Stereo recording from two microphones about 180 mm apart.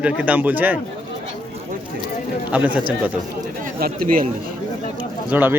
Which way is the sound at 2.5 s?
10° right (ahead or behind).